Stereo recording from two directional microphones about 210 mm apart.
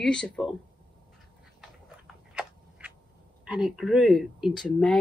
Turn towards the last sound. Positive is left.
turn(degrees=0)  # may be behind; listen again after turning